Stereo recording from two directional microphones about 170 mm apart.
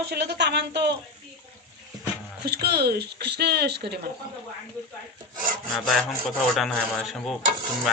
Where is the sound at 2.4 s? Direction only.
70° right (ahead or behind).